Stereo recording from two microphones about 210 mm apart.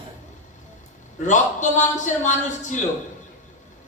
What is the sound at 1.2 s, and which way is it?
A man's voice, 35° left (ahead or behind).